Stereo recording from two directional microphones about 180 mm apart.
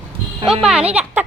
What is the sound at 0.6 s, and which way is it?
Speech, 5° right (ahead or behind).